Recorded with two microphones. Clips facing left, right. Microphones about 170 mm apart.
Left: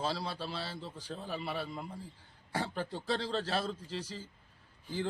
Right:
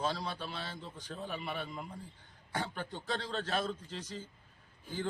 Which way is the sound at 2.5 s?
30° left (ahead or behind).